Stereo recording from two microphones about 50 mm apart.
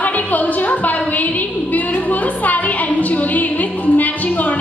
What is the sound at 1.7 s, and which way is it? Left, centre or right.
Music, left.